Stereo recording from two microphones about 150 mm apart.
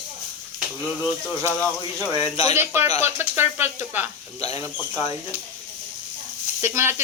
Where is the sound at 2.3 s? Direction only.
45° left (ahead or behind).